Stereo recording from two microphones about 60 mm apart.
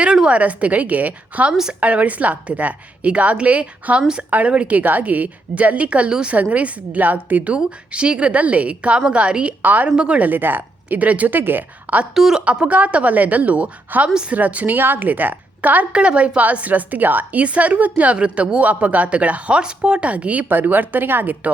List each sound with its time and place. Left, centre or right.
0.0 s a woman's voice: centre
4.3 s a woman's voice: right
9.6 s a woman's voice: right
9.9 s speech: centre
10.2 s a woman's voice: right
12.1 s speech: centre
12.6 s a woman's voice: right
14.3 s a woman's voice: right